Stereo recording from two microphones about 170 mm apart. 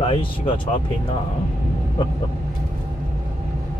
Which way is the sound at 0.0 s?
30° left (ahead or behind).